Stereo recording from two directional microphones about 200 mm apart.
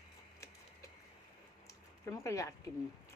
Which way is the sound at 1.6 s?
15° left (ahead or behind).